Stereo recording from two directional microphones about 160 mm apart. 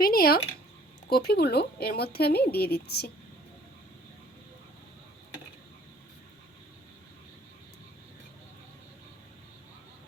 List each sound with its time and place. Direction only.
0.0 s speech: 70° left (ahead or behind)
1.1 s speech: 80° left